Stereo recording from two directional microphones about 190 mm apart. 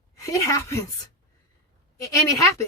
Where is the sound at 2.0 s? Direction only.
15° left (ahead or behind).